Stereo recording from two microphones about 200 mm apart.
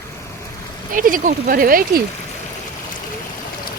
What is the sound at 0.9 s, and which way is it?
Speech, 40° right (ahead or behind).